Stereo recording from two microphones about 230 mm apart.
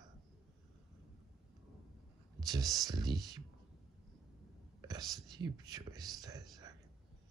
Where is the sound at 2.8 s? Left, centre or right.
Centre.